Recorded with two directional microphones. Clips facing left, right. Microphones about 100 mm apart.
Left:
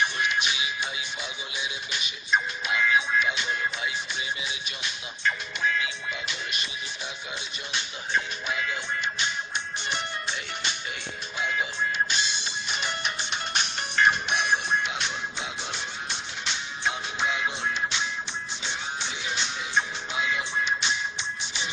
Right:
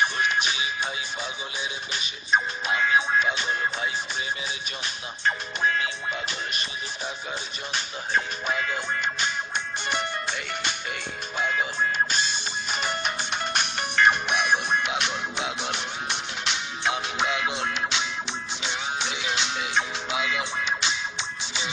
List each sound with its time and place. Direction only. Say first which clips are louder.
0.0 s music: right 2 dB; 40° right (ahead or behind)
1.9 s music: right 2 dB; 35° right (ahead or behind)
7.7 s music: right 2 dB; 40° right (ahead or behind); by 21.6 s 90° right